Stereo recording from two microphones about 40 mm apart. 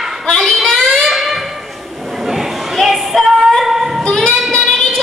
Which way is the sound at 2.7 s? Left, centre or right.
Centre.